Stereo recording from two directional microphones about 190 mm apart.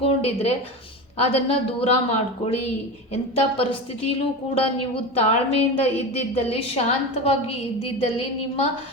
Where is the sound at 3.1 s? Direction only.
30° left (ahead or behind).